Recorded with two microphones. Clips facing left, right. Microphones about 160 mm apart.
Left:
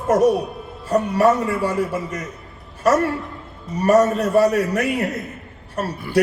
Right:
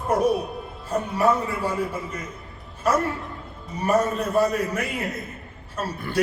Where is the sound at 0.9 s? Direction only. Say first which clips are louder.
Left 5 dB; 75° left (ahead or behind).